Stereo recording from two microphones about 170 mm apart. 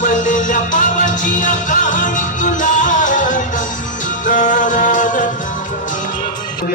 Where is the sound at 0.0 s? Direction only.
50° left (ahead or behind).